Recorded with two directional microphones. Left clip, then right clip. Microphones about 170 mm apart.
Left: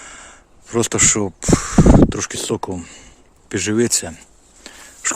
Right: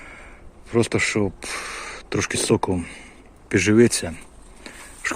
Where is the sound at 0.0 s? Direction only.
30° left (ahead or behind).